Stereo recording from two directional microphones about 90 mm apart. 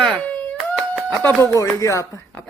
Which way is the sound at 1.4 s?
35° left (ahead or behind).